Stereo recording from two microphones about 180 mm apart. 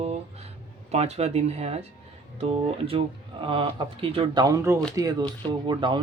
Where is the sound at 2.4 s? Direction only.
35° right (ahead or behind).